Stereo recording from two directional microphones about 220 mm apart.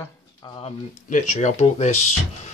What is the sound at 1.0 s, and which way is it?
Speech, 35° left (ahead or behind).